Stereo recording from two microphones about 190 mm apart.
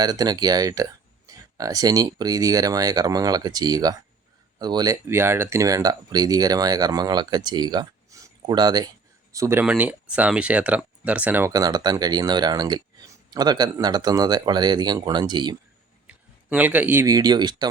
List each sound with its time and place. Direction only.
0.0 s speech: 20° right (ahead or behind)
16.0 s speech: 5° right (ahead or behind)